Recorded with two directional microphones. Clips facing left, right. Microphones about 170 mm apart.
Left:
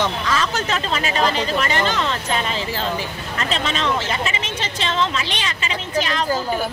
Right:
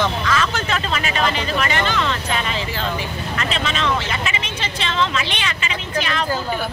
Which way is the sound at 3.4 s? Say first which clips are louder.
Left 1 dB; 35° left (ahead or behind).